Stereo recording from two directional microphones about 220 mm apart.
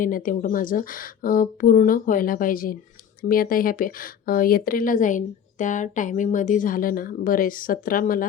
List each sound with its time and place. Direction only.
0.0 s speech: 40° left (ahead or behind)